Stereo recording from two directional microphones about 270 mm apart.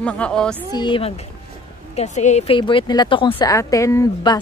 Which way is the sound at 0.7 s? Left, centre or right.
Centre.